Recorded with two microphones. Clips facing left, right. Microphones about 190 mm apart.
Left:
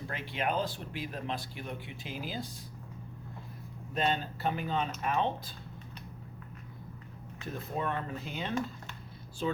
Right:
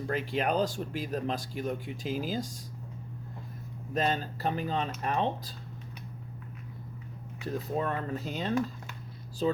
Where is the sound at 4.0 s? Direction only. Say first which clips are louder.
Right 2 dB; 40° right (ahead or behind).